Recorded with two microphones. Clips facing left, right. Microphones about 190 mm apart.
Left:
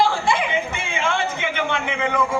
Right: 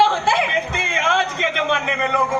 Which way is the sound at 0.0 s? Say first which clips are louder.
Right 2 dB; 65° right (ahead or behind).